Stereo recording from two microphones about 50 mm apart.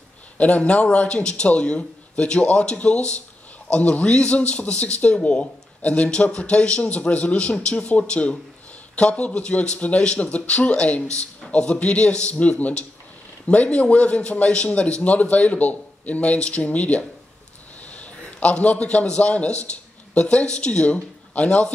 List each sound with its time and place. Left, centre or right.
0.4 s a man's voice: left